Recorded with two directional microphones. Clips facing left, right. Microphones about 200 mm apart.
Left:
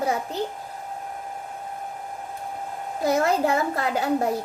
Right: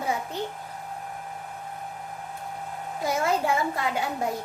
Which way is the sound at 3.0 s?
40° left (ahead or behind).